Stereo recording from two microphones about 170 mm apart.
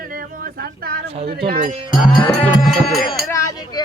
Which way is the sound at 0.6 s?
60° right (ahead or behind).